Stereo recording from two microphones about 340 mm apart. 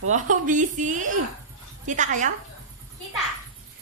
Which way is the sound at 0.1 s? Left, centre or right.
Right.